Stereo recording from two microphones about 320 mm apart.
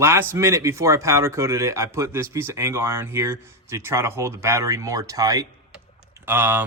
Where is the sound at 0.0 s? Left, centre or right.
Centre.